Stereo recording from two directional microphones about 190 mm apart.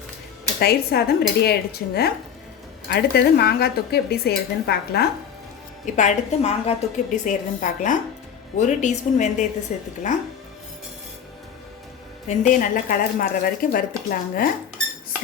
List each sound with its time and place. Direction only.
0.6 s speech: 55° left (ahead or behind)
5.8 s a woman's voice: 40° left (ahead or behind)
12.3 s a woman's voice: 40° left (ahead or behind)